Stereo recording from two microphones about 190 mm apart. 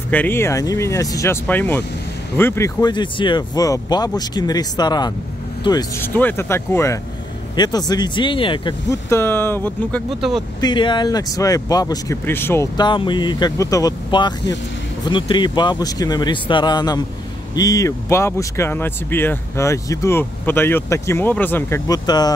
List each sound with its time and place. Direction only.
0.1 s speech: 10° left (ahead or behind); by 8.7 s 25° left (ahead or behind)
8.9 s speech: 15° left (ahead or behind)
10.6 s speech: 25° left (ahead or behind)
12.7 s speech: 25° left (ahead or behind)